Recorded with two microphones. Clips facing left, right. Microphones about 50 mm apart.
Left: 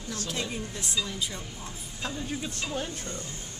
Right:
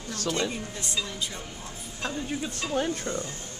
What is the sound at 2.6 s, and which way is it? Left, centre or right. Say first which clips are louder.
Speech: right 7 dB; right.